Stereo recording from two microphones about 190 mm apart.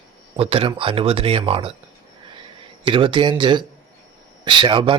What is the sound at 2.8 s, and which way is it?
A man's voice, 25° right (ahead or behind).